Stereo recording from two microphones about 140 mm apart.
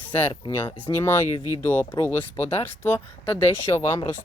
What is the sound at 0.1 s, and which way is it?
Speech, 15° left (ahead or behind).